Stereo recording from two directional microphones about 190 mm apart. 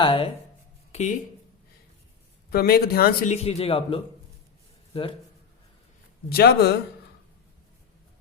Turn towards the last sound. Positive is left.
turn(degrees=55)  # may be behind; listen again after turning